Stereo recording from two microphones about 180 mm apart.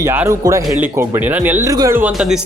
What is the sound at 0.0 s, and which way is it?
A man's voice, 15° right (ahead or behind).